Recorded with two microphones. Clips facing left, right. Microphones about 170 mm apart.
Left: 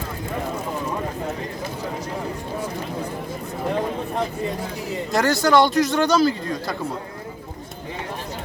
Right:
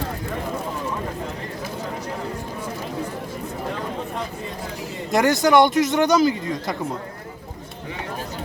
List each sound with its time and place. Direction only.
5.1 s speech: 20° right (ahead or behind)